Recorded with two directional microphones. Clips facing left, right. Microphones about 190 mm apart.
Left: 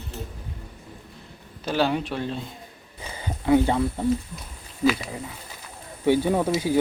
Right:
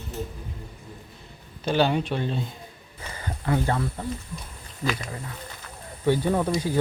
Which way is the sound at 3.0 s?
10° left (ahead or behind).